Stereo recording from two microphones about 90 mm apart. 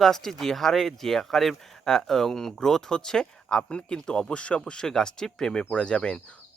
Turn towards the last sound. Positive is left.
turn(degrees=10)  # may be behind; listen again after turning